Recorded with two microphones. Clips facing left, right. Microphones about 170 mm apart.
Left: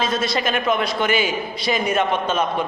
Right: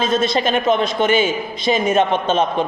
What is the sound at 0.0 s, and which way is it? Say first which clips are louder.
A woman's voice: right 4 dB; 25° right (ahead or behind).